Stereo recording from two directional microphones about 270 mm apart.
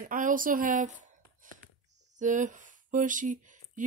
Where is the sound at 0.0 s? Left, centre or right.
Right.